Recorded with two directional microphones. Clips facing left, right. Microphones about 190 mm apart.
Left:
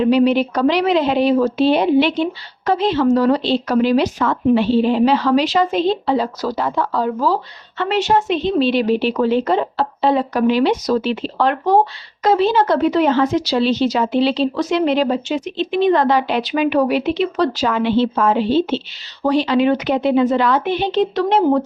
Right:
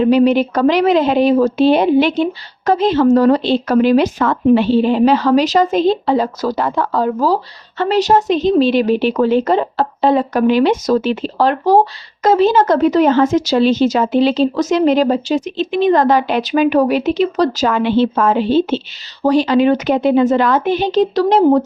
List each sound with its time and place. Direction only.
0.0 s a woman's voice: 45° right (ahead or behind)
5.0 s a woman's voice: 45° right (ahead or behind)